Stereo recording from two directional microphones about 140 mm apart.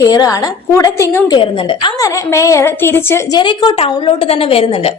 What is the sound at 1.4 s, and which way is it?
Speech, 35° left (ahead or behind).